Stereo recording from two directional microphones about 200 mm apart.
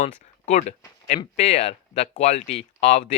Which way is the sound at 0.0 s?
35° left (ahead or behind).